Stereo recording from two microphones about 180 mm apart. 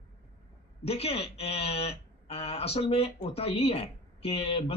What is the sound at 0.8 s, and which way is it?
Speech, 35° left (ahead or behind).